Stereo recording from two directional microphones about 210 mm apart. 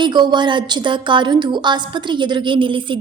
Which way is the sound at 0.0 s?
20° right (ahead or behind).